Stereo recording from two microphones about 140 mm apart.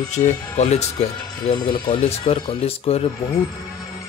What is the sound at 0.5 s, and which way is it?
Speech, 50° left (ahead or behind).